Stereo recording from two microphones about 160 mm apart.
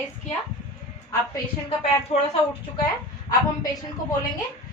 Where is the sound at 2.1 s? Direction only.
40° left (ahead or behind).